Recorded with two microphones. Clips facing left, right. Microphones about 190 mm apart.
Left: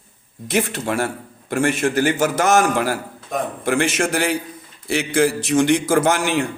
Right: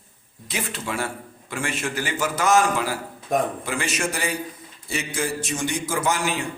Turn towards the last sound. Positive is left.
turn(degrees=70)  # may be behind; listen again after turning